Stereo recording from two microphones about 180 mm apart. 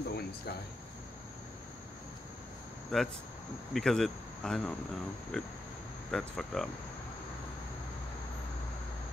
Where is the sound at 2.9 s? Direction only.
5° left (ahead or behind).